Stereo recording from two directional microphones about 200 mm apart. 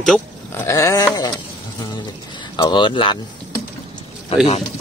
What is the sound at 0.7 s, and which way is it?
Sheep, 15° left (ahead or behind).